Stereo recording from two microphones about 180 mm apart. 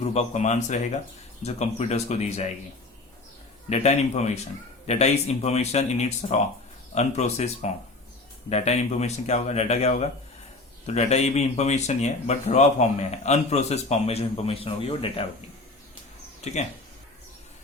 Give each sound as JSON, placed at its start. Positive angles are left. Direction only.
{"t": 0.0, "sound": "speech", "side_deg": 40}
{"t": 3.7, "sound": "speech", "side_deg": 40}